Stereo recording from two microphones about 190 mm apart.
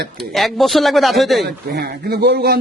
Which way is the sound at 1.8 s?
55° right (ahead or behind).